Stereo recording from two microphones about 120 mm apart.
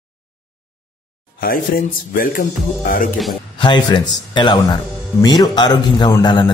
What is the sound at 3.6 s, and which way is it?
Speech, 40° left (ahead or behind).